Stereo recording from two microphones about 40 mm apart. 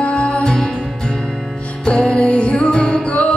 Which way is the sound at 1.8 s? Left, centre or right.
Left.